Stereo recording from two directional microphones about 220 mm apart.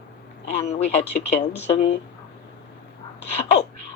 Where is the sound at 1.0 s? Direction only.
25° left (ahead or behind).